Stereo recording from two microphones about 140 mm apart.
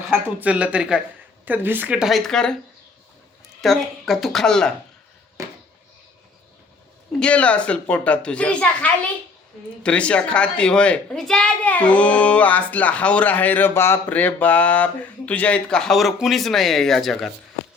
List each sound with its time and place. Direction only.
0.3 s speech: 10° right (ahead or behind)
3.6 s speech: centre (ahead or behind)
7.2 s a woman's voice: 10° left (ahead or behind)